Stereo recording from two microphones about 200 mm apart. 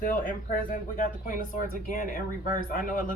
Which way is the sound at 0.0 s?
40° left (ahead or behind).